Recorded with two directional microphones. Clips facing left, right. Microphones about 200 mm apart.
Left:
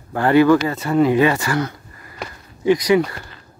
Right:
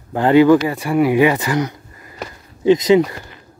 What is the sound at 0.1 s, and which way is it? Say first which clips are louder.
Speech: right 2 dB; 15° right (ahead or behind).